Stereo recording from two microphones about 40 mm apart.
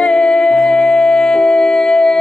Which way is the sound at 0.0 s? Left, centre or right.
Centre.